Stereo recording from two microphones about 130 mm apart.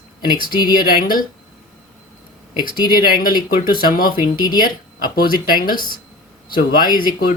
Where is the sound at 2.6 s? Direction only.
90° left.